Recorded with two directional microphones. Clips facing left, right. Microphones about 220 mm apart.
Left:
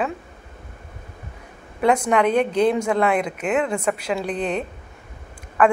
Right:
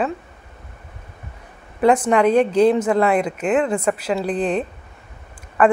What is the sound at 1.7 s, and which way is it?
Speech, 5° left (ahead or behind).